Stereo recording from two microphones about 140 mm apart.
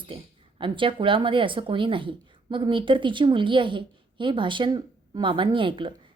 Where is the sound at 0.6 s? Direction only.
35° right (ahead or behind).